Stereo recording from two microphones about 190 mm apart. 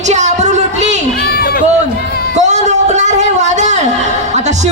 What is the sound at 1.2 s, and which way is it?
Run, 55° left (ahead or behind).